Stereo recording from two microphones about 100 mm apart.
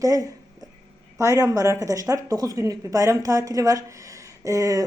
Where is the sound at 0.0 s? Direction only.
35° right (ahead or behind).